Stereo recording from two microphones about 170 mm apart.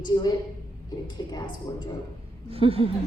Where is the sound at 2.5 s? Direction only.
35° right (ahead or behind).